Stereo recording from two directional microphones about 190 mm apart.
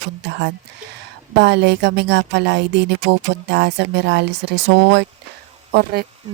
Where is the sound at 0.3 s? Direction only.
65° right (ahead or behind).